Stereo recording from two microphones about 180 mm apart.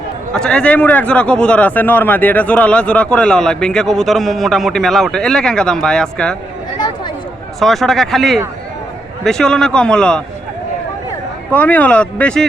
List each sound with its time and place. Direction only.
0.3 s a man's voice: 5° left (ahead or behind)
6.7 s a sound: 25° left (ahead or behind)
7.6 s a man's voice: centre (ahead or behind)
11.5 s speech: 10° left (ahead or behind)